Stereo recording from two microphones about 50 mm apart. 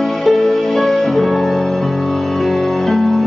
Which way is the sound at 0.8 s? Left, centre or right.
Left.